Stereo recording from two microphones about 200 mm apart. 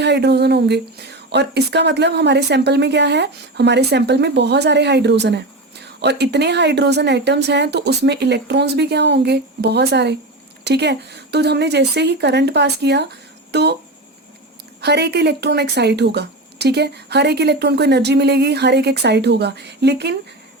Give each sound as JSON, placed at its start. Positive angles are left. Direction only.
{"t": 0.0, "sound": "speech", "side_deg": -55}
{"t": 14.8, "sound": "speech", "side_deg": -55}